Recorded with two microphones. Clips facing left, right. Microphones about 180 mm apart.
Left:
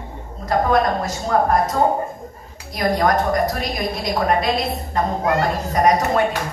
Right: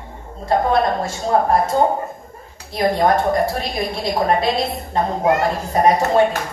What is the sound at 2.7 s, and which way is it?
A woman's voice, 25° right (ahead or behind).